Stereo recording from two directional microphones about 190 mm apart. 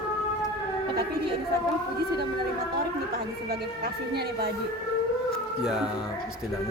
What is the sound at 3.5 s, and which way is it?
Speech, 55° right (ahead or behind).